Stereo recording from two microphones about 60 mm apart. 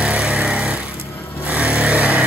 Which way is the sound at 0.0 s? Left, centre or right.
Centre.